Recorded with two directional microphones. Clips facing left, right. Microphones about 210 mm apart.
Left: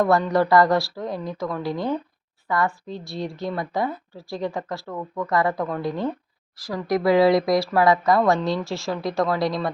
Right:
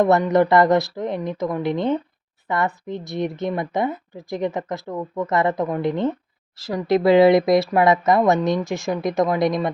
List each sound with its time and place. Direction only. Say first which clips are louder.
0.0 s speech: right 3 dB; 20° right (ahead or behind)